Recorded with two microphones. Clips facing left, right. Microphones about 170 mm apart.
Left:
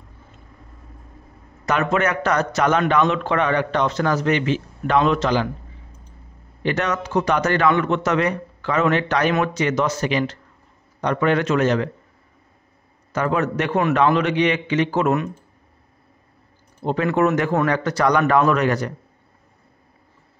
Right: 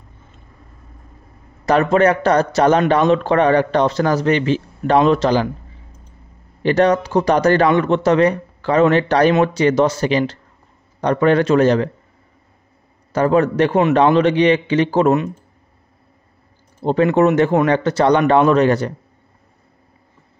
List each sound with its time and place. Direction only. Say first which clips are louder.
1.7 s a man's voice: right 7 dB; 35° right (ahead or behind)
6.6 s a man's voice: right 8 dB; 35° right (ahead or behind)
13.1 s a man's voice: right 6 dB; 35° right (ahead or behind)
16.8 s a man's voice: right 5 dB; 30° right (ahead or behind)